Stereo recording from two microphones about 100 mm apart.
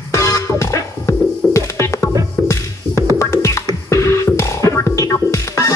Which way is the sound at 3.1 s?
30° left (ahead or behind).